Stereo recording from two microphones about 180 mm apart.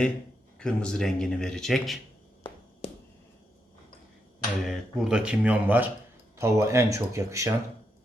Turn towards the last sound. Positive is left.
turn(degrees=-15)  # may be behind; listen again after turning